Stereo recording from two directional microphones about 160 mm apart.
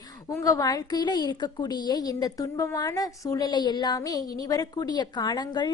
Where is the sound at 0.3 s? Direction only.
20° left (ahead or behind).